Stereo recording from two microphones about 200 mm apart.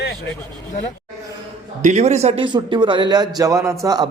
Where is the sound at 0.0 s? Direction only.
65° left (ahead or behind).